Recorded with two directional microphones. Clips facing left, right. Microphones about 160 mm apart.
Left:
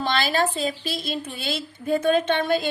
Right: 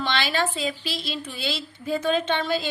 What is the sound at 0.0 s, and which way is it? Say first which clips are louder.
A woman's voice: left 2 dB; 40° left (ahead or behind).